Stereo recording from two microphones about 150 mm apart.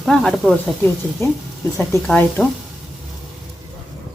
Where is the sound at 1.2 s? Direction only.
20° left (ahead or behind).